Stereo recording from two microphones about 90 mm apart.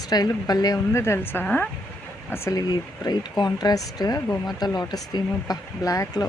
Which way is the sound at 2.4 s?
45° left (ahead or behind).